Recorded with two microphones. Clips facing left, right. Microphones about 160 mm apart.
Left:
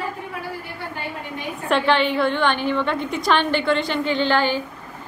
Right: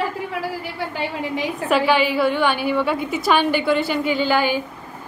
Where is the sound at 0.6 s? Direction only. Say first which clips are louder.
Right 5 dB; 90° right.